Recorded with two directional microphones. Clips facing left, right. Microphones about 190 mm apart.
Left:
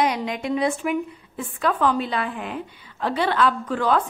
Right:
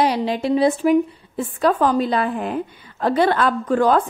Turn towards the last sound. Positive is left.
turn(degrees=-45)  # may be behind; listen again after turning